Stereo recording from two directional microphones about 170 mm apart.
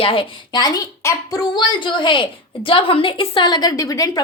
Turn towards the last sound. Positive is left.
turn(degrees=20)  # may be behind; listen again after turning